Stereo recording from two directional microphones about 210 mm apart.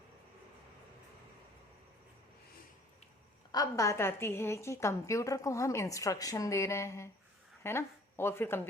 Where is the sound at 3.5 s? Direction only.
15° left (ahead or behind).